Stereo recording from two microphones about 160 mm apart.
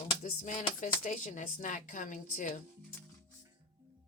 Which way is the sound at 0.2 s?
55° left (ahead or behind).